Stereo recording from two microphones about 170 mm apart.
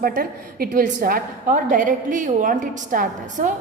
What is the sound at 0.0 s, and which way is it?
A woman's voice, 60° right (ahead or behind).